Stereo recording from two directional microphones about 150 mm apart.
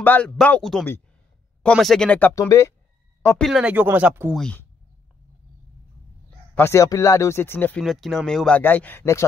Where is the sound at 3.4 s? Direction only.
5° right (ahead or behind).